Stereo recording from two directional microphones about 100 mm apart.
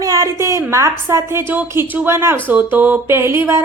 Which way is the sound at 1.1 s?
25° right (ahead or behind).